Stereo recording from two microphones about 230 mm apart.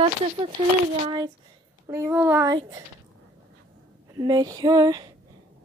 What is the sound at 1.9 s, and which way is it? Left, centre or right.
Speech, centre.